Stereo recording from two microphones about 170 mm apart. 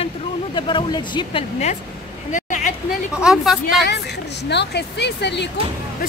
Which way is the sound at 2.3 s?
50° left (ahead or behind).